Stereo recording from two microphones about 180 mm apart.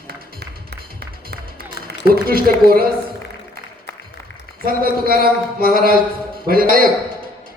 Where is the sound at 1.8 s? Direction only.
60° left (ahead or behind).